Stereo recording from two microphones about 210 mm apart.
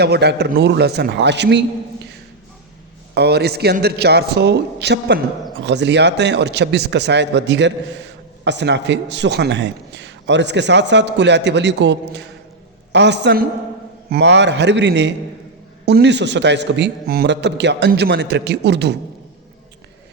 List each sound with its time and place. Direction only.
0.0 s a man's voice: 50° right (ahead or behind)
3.2 s a man's voice: 50° right (ahead or behind)